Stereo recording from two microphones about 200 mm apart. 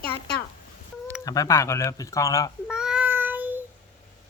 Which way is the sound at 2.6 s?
5° right (ahead or behind).